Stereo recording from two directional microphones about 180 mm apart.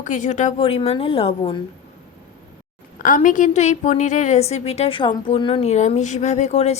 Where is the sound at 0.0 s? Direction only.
45° left (ahead or behind).